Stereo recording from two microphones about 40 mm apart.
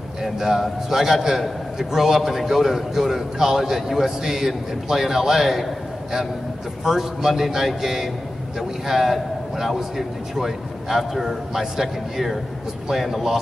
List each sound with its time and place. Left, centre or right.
0.2 s a man's voice: centre
6.8 s a man's voice: centre